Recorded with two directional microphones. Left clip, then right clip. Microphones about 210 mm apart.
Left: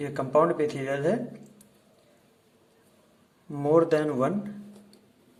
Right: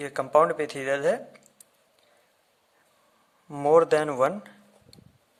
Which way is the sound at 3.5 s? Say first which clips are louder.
Right 3 dB; 35° right (ahead or behind).